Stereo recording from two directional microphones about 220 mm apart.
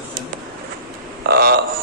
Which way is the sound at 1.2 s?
45° right (ahead or behind).